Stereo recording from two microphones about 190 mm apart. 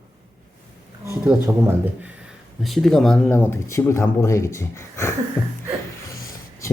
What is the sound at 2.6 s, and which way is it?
Speech, centre (ahead or behind).